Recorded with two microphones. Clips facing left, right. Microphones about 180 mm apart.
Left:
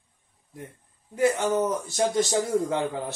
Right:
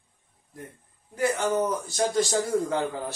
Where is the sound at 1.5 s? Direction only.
20° left (ahead or behind).